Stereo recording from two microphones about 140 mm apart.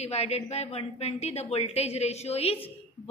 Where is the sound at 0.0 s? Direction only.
50° left (ahead or behind).